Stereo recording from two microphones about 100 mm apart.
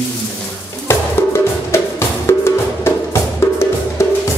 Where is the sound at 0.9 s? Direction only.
25° left (ahead or behind).